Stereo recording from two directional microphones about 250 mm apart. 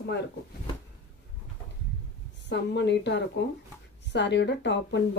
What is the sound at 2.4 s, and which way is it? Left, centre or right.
Speech, left.